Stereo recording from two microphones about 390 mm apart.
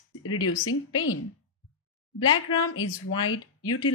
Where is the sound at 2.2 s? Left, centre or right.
Left.